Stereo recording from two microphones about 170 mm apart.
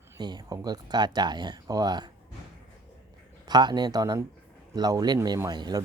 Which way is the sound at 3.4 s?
25° right (ahead or behind).